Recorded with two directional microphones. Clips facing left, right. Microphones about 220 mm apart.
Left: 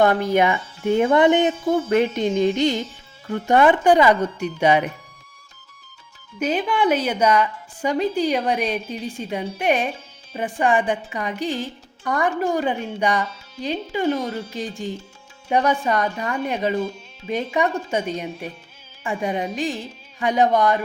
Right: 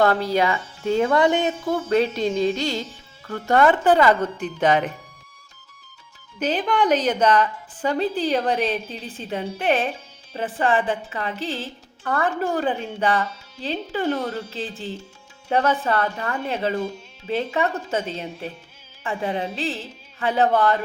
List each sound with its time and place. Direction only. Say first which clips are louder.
0.0 s a woman's voice: left 2 dB; 20° left (ahead or behind)
6.4 s a woman's voice: left 1 dB; 10° left (ahead or behind)